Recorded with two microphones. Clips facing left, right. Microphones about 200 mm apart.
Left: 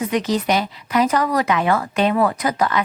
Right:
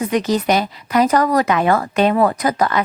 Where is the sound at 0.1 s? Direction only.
40° right (ahead or behind).